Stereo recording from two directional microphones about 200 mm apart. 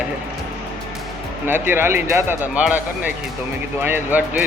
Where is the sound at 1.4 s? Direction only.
10° right (ahead or behind).